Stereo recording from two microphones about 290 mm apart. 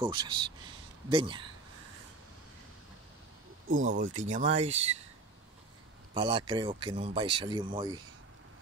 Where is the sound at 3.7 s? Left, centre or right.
Right.